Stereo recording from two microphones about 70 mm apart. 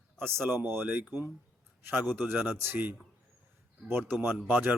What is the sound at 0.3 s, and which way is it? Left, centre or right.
Speech, right.